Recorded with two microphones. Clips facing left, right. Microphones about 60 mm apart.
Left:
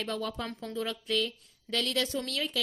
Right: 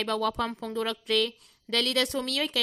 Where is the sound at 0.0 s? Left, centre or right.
Right.